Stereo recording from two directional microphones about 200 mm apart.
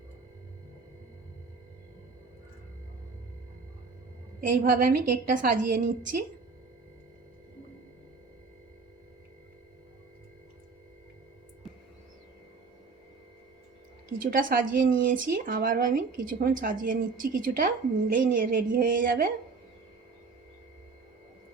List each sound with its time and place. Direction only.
4.4 s speech: 45° right (ahead or behind)
14.3 s speech: 45° right (ahead or behind)